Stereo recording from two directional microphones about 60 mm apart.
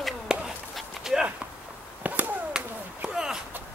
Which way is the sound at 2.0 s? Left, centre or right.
Right.